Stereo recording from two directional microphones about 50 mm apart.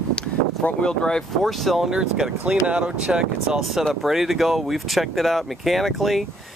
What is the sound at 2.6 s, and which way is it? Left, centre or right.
Speech, right.